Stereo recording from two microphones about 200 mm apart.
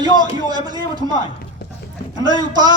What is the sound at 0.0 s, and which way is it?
A man's voice, 20° right (ahead or behind).